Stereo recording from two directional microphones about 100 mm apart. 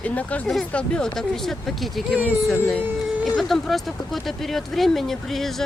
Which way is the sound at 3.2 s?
Centre (ahead or behind).